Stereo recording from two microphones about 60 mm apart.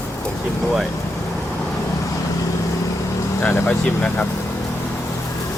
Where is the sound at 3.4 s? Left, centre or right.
Left.